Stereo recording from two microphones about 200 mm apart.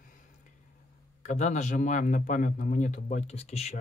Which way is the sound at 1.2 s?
35° left (ahead or behind).